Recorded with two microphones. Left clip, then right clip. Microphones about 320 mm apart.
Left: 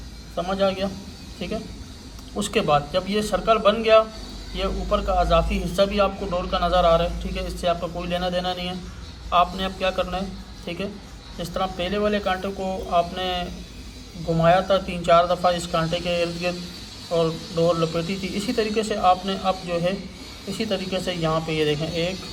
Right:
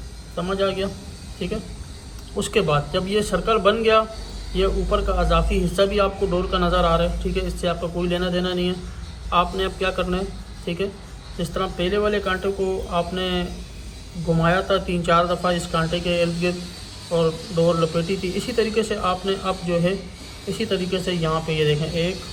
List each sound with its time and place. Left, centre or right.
0.3 s a man's voice: left